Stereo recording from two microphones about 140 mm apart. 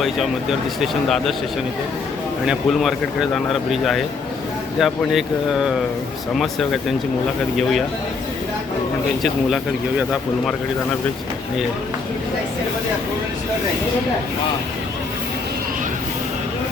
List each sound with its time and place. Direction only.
0.8 s speech: centre (ahead or behind)
2.5 s speech: centre (ahead or behind)